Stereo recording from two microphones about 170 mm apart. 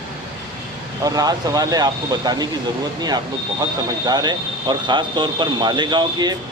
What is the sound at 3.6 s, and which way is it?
Speech, 25° right (ahead or behind).